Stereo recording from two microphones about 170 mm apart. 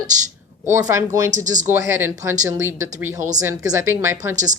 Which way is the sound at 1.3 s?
45° right (ahead or behind).